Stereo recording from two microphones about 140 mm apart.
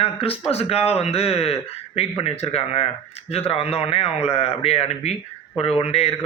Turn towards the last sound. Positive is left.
turn(degrees=45)  # may be behind; listen again after turning